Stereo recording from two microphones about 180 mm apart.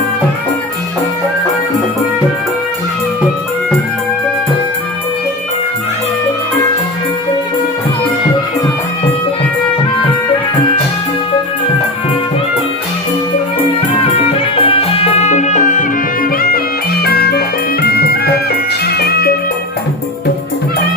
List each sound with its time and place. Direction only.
14.0 s music: 30° left (ahead or behind); by 19.3 s 60° left (ahead or behind)